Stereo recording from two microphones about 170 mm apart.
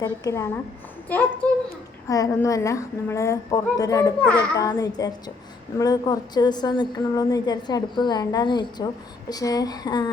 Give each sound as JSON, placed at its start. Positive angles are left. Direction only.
{"t": 0.0, "sound": "a woman's voice", "side_deg": 15}
{"t": 2.0, "sound": "a woman's voice", "side_deg": 20}